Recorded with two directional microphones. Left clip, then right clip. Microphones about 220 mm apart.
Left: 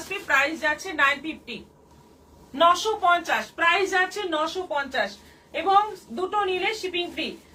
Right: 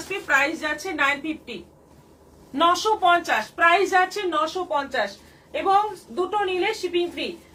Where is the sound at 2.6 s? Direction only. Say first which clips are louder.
Right 1 dB; 20° right (ahead or behind).